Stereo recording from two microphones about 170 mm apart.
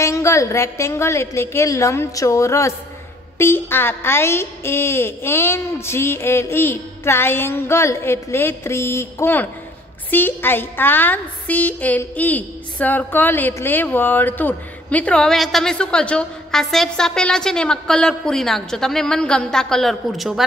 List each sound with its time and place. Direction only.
0.0 s a woman's voice: 15° left (ahead or behind); by 20.4 s centre (ahead or behind)